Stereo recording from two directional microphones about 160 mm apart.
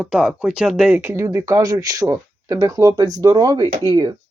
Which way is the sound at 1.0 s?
20° right (ahead or behind).